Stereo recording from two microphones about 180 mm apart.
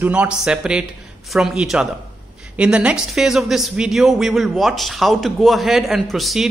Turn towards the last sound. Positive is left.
turn(degrees=0)  # may be behind; listen again after turning